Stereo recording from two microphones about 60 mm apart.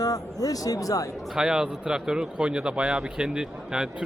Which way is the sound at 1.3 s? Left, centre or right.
Centre.